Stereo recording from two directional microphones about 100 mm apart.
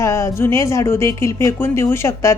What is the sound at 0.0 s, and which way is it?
A woman's voice, 25° left (ahead or behind).